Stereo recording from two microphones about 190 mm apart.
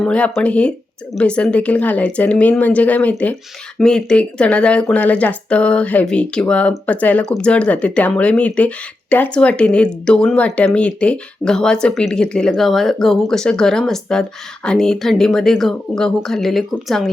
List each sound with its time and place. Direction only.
0.0 s speech: 5° left (ahead or behind)